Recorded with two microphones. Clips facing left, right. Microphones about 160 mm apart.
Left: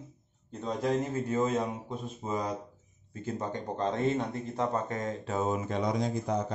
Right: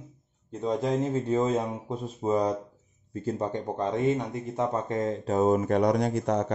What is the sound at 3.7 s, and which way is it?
Speech, 15° right (ahead or behind).